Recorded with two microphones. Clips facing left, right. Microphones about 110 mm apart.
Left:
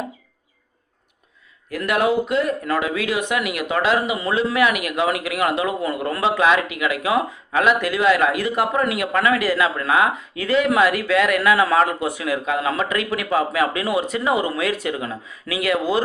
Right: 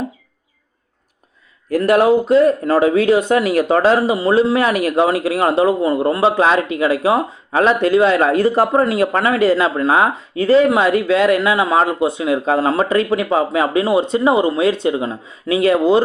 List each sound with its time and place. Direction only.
1.7 s speech: 35° right (ahead or behind)